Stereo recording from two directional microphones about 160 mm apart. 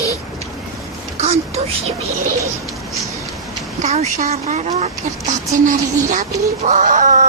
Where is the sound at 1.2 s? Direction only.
40° right (ahead or behind).